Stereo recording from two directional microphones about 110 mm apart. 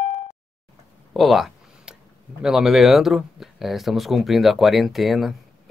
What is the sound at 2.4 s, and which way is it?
Speech, 5° right (ahead or behind).